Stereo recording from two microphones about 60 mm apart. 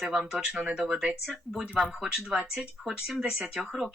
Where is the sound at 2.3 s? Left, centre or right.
Centre.